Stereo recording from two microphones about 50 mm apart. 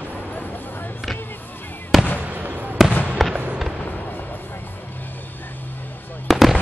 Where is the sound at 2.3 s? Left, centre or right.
Right.